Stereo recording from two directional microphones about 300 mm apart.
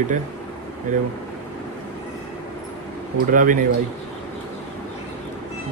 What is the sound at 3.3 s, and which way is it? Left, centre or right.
Speech, right.